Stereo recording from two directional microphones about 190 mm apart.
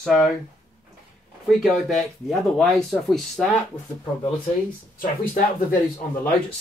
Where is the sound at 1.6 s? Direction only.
Centre (ahead or behind).